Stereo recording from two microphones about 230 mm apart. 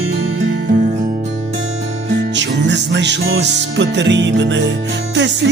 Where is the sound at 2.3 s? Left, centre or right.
Right.